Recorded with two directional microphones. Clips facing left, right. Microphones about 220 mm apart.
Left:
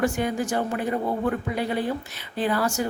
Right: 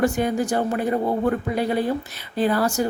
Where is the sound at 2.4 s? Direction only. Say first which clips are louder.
Right 4 dB; 40° right (ahead or behind).